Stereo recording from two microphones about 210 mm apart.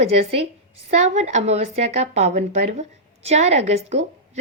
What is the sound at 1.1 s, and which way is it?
Speech, 35° right (ahead or behind).